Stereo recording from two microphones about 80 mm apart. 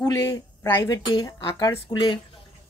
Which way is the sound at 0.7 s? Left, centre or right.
Left.